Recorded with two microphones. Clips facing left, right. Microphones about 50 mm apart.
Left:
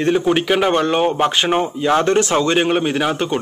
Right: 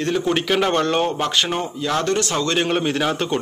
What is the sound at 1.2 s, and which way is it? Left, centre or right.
Speech, left.